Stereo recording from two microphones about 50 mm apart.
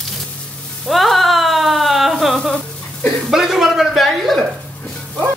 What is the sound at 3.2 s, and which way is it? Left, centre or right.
Speech, centre.